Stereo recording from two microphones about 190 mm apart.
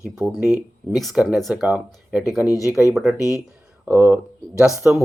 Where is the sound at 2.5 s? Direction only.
15° left (ahead or behind).